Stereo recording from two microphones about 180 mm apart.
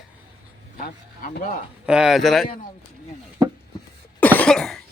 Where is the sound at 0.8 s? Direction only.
55° left (ahead or behind).